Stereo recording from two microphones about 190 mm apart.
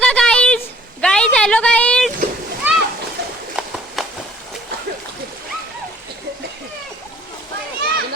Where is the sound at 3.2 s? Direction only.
55° right (ahead or behind).